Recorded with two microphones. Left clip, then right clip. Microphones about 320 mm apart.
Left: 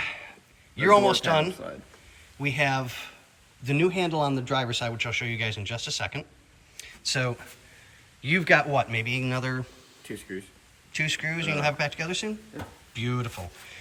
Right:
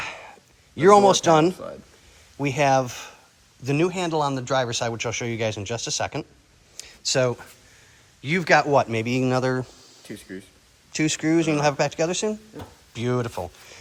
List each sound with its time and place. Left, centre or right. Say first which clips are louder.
0.0 s a sound: even; centre
0.8 s a man's voice: right 5 dB; centre
6.7 s a sound: right 6 dB; centre
8.2 s a man's voice: right 2 dB; centre
10.1 s speech: left 1 dB; right
10.9 s a man's voice: right 6 dB; centre